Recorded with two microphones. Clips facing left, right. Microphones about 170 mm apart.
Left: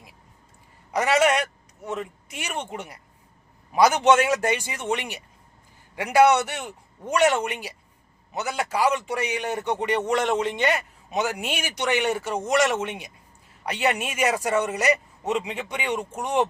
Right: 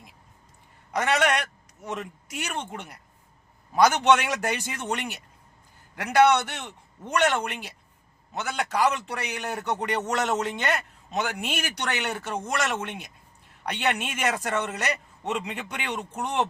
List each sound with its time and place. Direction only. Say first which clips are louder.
0.9 s a man's voice: left 3 dB; 5° left (ahead or behind)